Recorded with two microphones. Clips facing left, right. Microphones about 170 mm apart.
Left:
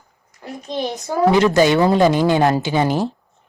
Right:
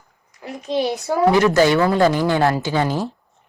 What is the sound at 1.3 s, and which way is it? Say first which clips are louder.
A woman's voice: left 1 dB; 20° left (ahead or behind).